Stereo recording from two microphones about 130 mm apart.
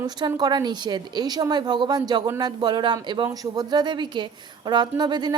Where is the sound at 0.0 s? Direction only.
30° right (ahead or behind).